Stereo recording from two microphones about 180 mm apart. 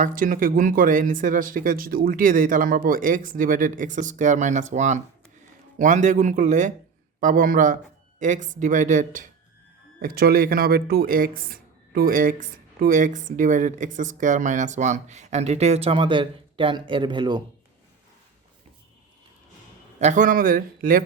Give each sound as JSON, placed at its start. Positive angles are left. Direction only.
{"t": 0.0, "sound": "speech", "side_deg": -50}
{"t": 10.0, "sound": "speech", "side_deg": -55}
{"t": 20.0, "sound": "speech", "side_deg": -45}